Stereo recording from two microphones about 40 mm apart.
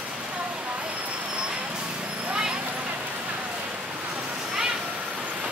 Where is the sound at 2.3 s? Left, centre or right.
Right.